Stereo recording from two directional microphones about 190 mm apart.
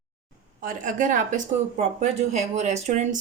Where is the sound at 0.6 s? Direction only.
45° right (ahead or behind).